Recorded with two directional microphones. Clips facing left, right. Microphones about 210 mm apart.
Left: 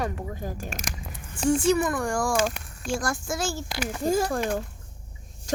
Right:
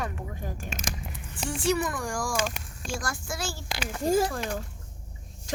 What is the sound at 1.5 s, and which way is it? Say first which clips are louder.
Speech: left 5 dB; 50° left (ahead or behind).